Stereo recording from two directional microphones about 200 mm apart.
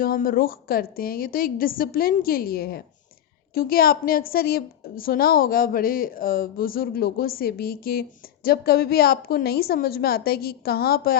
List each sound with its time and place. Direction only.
0.0 s a woman's voice: 45° left (ahead or behind)